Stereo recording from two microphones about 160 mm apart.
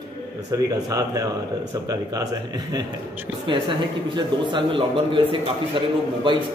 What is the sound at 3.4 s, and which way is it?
A man's voice, 30° right (ahead or behind).